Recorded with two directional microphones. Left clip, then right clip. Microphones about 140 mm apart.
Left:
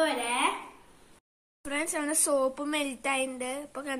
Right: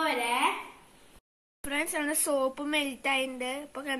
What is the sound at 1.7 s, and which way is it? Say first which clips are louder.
A woman's voice: right 1 dB; 15° right (ahead or behind).